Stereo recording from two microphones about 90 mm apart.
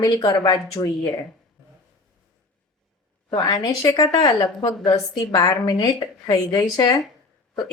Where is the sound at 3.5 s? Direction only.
45° left (ahead or behind).